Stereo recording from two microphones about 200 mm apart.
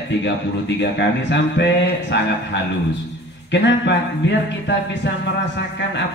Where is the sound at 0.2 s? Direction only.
60° left (ahead or behind).